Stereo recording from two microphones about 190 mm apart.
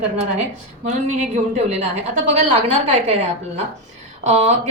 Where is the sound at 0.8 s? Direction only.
40° right (ahead or behind).